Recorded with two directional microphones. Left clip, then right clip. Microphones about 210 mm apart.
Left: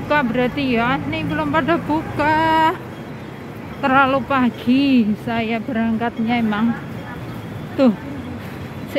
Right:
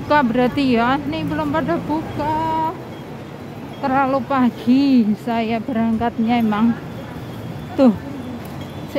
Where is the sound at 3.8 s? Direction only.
Centre (ahead or behind).